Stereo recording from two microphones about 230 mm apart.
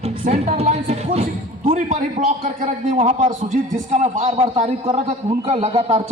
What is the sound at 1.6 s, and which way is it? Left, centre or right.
A man's voice, right.